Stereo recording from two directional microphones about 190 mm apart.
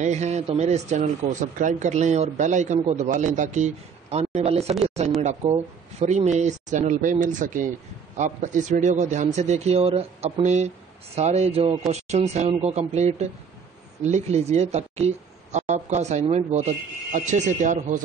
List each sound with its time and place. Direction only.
0.0 s speech: 35° right (ahead or behind)